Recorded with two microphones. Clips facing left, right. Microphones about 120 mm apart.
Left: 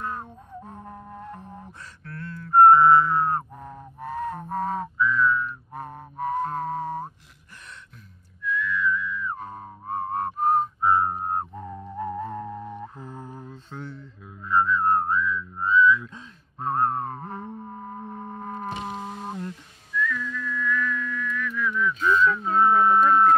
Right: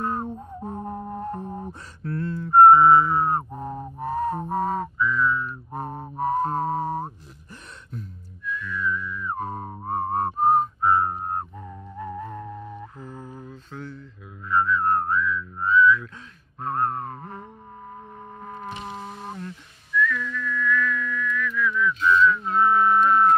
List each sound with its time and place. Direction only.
0.0 s music: 40° right (ahead or behind); by 3.4 s 15° right (ahead or behind)
3.5 s music: 30° right (ahead or behind)
4.5 s whistling: 10° right (ahead or behind)
5.2 s whistling: 20° right (ahead or behind)
5.5 s music: 30° right (ahead or behind)
8.5 s whistling: 40° right (ahead or behind)
10.9 s music: 15° left (ahead or behind)
14.5 s whistling: 20° left (ahead or behind)
16.6 s music: 20° left (ahead or behind)
20.0 s whistling: 10° left (ahead or behind)
22.6 s a sound: 30° left (ahead or behind)